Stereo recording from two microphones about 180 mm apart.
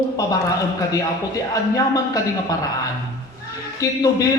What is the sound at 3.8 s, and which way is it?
Speech, 20° left (ahead or behind).